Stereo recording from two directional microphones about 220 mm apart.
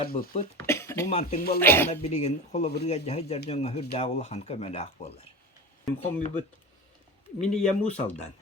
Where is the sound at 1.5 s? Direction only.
10° left (ahead or behind).